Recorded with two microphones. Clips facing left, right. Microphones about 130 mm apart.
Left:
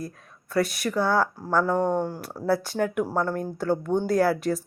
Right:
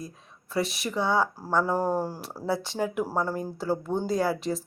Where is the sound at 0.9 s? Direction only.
20° right (ahead or behind).